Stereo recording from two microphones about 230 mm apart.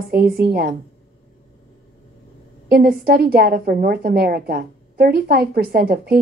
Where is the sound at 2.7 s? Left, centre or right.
Right.